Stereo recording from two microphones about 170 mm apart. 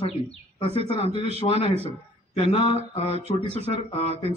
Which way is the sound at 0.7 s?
35° right (ahead or behind).